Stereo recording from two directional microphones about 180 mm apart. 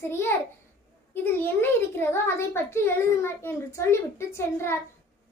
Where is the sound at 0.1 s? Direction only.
15° left (ahead or behind).